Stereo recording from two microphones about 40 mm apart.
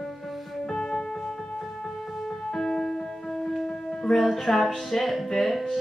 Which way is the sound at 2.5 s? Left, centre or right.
Centre.